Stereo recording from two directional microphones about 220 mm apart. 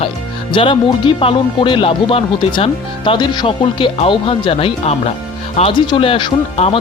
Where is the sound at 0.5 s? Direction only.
20° left (ahead or behind).